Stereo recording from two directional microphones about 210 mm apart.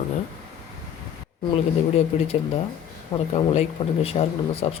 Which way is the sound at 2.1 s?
35° left (ahead or behind).